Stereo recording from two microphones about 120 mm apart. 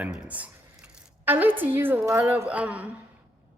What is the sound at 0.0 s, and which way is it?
Squish, 10° right (ahead or behind).